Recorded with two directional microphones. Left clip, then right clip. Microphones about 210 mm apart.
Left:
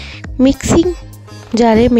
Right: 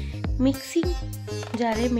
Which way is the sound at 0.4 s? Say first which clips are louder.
Left 13 dB; 50° left (ahead or behind).